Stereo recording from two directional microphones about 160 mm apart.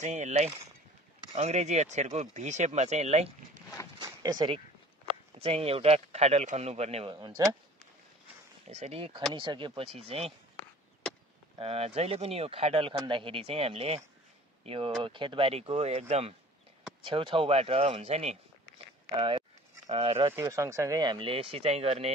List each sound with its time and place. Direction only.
0.0 s speech: 45° right (ahead or behind)
4.0 s a sound: 25° right (ahead or behind)
5.0 s speech: 35° right (ahead or behind)
7.2 s speech: 25° right (ahead or behind)
8.6 s speech: 45° right (ahead or behind)
11.5 s speech: 35° right (ahead or behind)
20.3 s speech: 20° right (ahead or behind); by 22.1 s 40° right (ahead or behind)